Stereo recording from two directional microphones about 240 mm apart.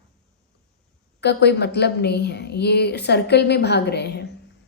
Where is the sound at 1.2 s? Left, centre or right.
Left.